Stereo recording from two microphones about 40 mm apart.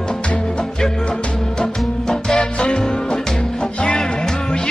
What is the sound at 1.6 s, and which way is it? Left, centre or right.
Music, centre.